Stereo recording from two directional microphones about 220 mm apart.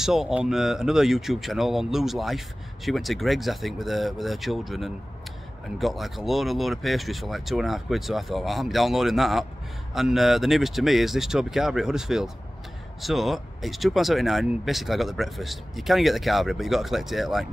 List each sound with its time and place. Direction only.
0.0 s speech: centre (ahead or behind)